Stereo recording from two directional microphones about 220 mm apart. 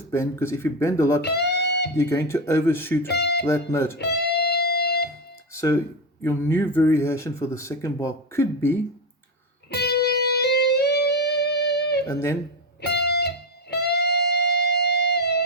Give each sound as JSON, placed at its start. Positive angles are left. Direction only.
{"t": 0.1, "sound": "speech", "side_deg": 10}
{"t": 1.5, "sound": "guitar", "side_deg": 50}
{"t": 2.0, "sound": "speech", "side_deg": 15}
{"t": 3.1, "sound": "speech", "side_deg": 50}
{"t": 3.4, "sound": "speech", "side_deg": 10}
{"t": 3.9, "sound": "music", "side_deg": 50}
{"t": 5.5, "sound": "speech", "side_deg": 15}
{"t": 9.6, "sound": "music", "side_deg": 50}
{"t": 12.0, "sound": "speech", "side_deg": 10}
{"t": 13.1, "sound": "music", "side_deg": 50}